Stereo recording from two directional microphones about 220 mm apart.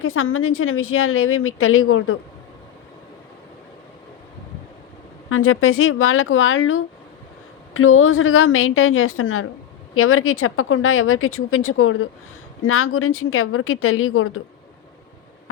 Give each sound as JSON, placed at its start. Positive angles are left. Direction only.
{"t": 0.0, "sound": "a woman's voice", "side_deg": 70}
{"t": 5.3, "sound": "a woman's voice", "side_deg": 70}